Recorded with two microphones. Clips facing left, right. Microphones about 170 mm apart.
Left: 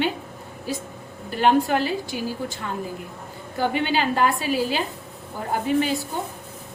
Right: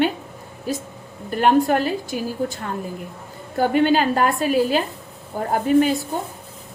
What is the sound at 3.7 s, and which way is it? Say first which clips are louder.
A woman's voice: right 8 dB; 45° right (ahead or behind).